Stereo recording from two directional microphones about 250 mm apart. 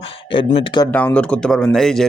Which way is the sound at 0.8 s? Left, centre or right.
Centre.